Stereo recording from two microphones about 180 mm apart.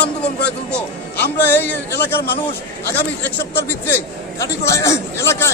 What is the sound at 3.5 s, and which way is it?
A man's voice, 10° left (ahead or behind).